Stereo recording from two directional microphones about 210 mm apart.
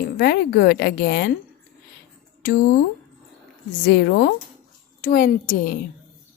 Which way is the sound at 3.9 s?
45° left (ahead or behind).